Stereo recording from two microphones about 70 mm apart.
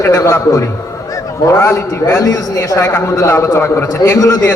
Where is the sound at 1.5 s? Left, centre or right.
Left.